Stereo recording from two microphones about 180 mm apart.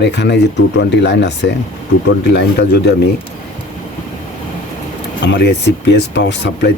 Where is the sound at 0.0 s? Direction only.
70° left (ahead or behind).